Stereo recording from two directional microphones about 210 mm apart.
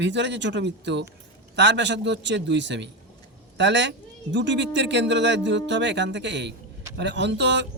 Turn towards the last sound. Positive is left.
turn(degrees=-55)  # may be behind; listen again after turning